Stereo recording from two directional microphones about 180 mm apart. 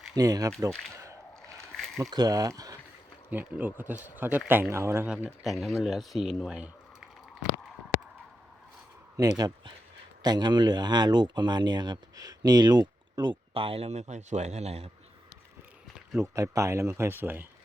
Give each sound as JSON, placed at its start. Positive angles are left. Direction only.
{"t": 0.2, "sound": "speech", "side_deg": -20}
{"t": 1.7, "sound": "a sound", "side_deg": 0}
{"t": 2.0, "sound": "speech", "side_deg": -20}
{"t": 3.2, "sound": "speech", "side_deg": -10}
{"t": 5.1, "sound": "speech", "side_deg": 0}
{"t": 10.2, "sound": "speech", "side_deg": -25}
{"t": 16.0, "sound": "speech", "side_deg": -15}